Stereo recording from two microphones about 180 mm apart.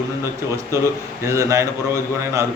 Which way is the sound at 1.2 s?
15° right (ahead or behind).